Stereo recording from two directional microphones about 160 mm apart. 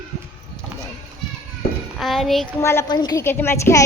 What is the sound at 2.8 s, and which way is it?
Speech, 25° left (ahead or behind).